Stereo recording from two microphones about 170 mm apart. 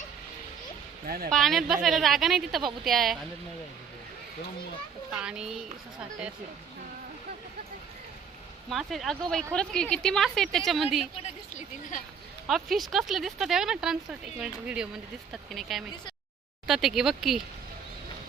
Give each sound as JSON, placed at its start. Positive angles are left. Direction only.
{"t": 1.0, "sound": "speech", "side_deg": -60}
{"t": 1.3, "sound": "speech", "side_deg": 0}
{"t": 5.1, "sound": "speech", "side_deg": -5}
{"t": 8.7, "sound": "speech", "side_deg": 0}
{"t": 11.5, "sound": "speech", "side_deg": 50}
{"t": 12.5, "sound": "speech", "side_deg": 0}